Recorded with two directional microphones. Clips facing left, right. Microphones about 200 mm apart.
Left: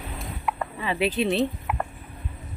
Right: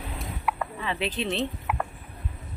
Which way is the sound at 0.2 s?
Centre (ahead or behind).